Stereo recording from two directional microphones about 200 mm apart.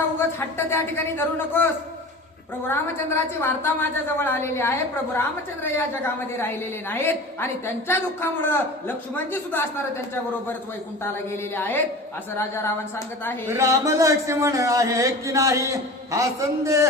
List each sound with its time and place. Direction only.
0.3 s a woman's voice: 10° left (ahead or behind)
11.0 s a woman's voice: 10° left (ahead or behind)
13.5 s speech: 15° right (ahead or behind)